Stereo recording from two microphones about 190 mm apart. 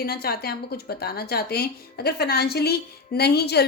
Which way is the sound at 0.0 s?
55° left (ahead or behind).